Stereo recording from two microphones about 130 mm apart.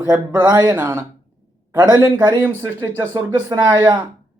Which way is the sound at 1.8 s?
30° right (ahead or behind).